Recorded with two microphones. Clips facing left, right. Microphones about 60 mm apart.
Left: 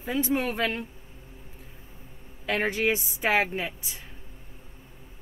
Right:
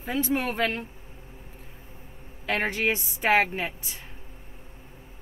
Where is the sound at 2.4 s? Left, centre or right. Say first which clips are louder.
Even; centre.